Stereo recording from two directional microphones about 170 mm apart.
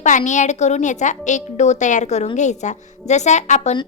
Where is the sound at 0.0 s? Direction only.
45° left (ahead or behind).